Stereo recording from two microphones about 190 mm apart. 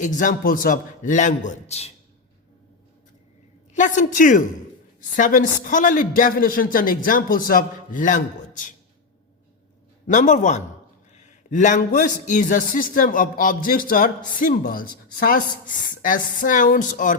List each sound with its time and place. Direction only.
0.0 s a man's voice: 40° left (ahead or behind)
3.8 s a man's voice: 40° left (ahead or behind)
10.1 s a man's voice: 40° left (ahead or behind)